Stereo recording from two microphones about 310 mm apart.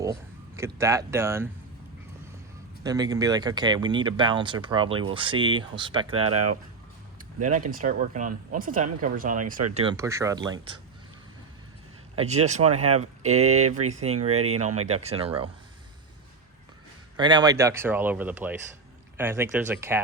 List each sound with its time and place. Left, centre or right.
0.0 s speech: centre
2.8 s speech: centre
6.1 s speech: right
7.4 s speech: right
9.7 s speech: centre
12.1 s speech: right
17.2 s speech: centre